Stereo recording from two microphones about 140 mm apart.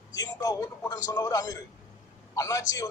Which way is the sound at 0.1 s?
25° left (ahead or behind).